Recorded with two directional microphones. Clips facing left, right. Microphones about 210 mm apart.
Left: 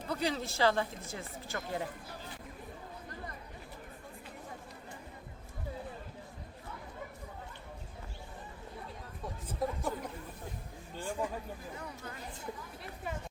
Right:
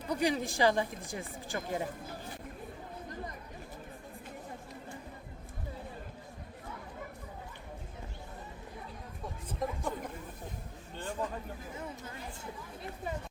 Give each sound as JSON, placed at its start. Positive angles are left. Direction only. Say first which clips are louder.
{"t": 0.1, "sound": "speech", "louder": "right 4 dB", "side_deg": -15}
{"t": 9.5, "sound": "chatter", "louder": "left 1 dB", "side_deg": 5}
{"t": 10.9, "sound": "a sound", "louder": "left 1 dB", "side_deg": 10}